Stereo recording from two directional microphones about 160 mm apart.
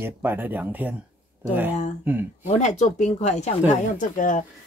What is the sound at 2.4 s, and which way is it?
Speech, 45° left (ahead or behind).